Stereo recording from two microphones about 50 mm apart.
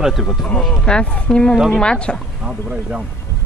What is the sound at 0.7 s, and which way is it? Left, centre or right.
Speech, centre.